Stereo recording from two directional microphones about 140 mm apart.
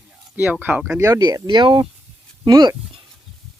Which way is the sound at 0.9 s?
20° right (ahead or behind).